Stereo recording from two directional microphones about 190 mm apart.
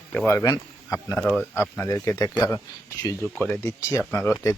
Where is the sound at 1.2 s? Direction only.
Centre (ahead or behind).